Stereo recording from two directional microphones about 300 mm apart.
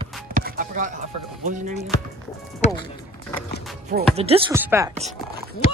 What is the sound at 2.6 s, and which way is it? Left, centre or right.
Speech, left.